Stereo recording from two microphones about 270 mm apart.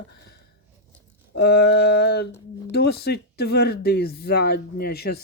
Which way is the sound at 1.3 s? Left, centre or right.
Left.